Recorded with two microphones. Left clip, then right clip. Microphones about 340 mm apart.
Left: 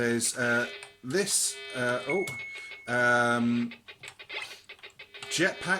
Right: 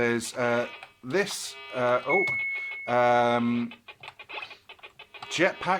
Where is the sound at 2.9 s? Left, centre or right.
Centre.